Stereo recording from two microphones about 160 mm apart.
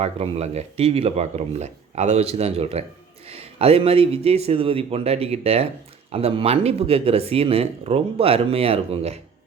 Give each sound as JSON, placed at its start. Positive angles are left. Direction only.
{"t": 0.0, "sound": "speech", "side_deg": -40}